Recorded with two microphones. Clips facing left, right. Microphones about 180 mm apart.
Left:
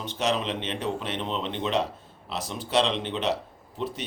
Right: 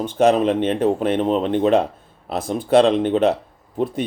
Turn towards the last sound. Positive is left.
turn(degrees=-50)  # may be behind; listen again after turning